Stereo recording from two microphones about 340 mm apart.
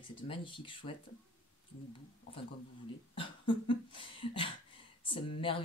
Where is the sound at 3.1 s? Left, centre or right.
Centre.